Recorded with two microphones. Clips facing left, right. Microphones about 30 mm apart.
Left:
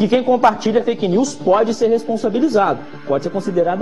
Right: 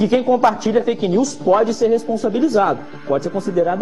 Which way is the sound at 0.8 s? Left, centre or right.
Centre.